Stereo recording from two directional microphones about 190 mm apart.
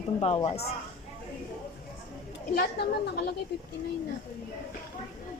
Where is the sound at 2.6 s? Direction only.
60° left (ahead or behind).